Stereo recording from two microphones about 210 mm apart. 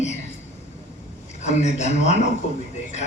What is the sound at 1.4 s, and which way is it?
Speech, 35° left (ahead or behind).